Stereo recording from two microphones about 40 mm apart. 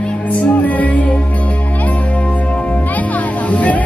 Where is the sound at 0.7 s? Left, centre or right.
Left.